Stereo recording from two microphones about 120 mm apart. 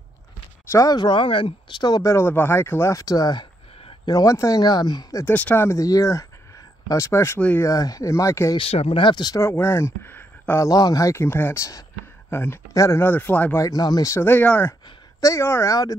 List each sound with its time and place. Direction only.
0.7 s speech: 30° left (ahead or behind)
5.2 s speech: 15° left (ahead or behind)
7.6 s speech: 30° left (ahead or behind)
8.5 s speech: 55° left (ahead or behind); by 9.4 s 35° left (ahead or behind)
9.4 s speech: 20° left (ahead or behind)
13.7 s speech: 30° left (ahead or behind); by 14.8 s 15° left (ahead or behind)
15.1 s speech: 25° left (ahead or behind)